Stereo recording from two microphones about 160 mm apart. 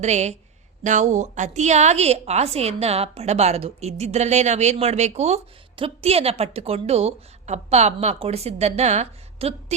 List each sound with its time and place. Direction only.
0.0 s a woman's voice: 45° right (ahead or behind)